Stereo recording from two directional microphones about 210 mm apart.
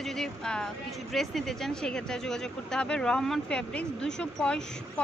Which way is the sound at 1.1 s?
Centre (ahead or behind).